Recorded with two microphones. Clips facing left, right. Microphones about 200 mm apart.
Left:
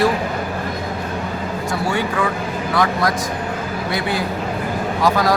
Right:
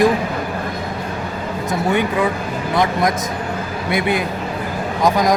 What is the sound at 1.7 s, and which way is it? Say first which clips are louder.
Speech: right 4 dB; 20° right (ahead or behind).